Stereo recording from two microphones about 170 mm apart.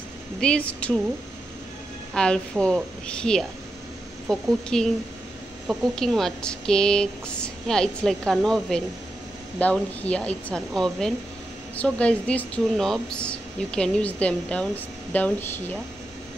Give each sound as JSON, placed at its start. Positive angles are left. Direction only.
{"t": 0.4, "sound": "speech", "side_deg": 5}
{"t": 2.1, "sound": "speech", "side_deg": 5}